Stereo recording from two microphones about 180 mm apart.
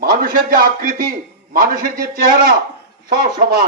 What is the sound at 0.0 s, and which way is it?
A man's voice, 50° right (ahead or behind).